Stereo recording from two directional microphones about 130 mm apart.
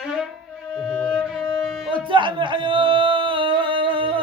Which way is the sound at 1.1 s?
5° right (ahead or behind).